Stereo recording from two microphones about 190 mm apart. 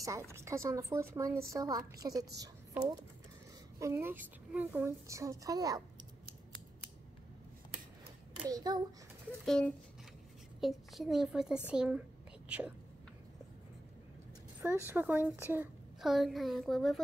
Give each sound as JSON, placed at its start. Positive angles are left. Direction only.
{"t": 0.0, "sound": "a woman's voice", "side_deg": -15}
{"t": 8.5, "sound": "a woman's voice", "side_deg": -20}
{"t": 9.5, "sound": "a woman's voice", "side_deg": 5}
{"t": 14.6, "sound": "a woman's voice", "side_deg": -10}